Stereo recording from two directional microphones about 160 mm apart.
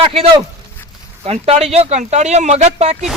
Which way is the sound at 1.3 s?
40° right (ahead or behind).